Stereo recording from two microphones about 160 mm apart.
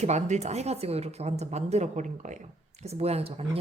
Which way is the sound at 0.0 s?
45° right (ahead or behind).